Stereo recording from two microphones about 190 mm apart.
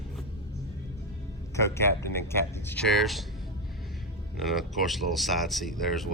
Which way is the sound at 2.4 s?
10° left (ahead or behind).